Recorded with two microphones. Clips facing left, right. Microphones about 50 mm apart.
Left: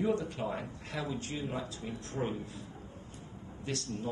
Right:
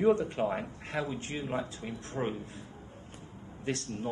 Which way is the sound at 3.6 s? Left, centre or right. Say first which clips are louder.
Right 3 dB; right.